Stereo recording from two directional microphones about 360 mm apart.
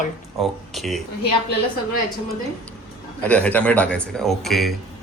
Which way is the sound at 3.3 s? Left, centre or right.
Centre.